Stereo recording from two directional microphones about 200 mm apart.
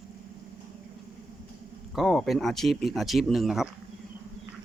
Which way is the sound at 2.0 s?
Centre (ahead or behind).